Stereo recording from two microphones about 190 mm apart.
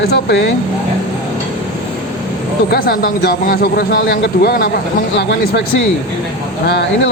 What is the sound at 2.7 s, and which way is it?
A man's voice, 50° left (ahead or behind).